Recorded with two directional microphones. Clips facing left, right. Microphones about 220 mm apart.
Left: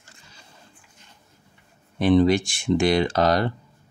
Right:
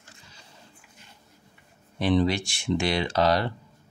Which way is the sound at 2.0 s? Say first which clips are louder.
Left 6 dB; 50° left (ahead or behind).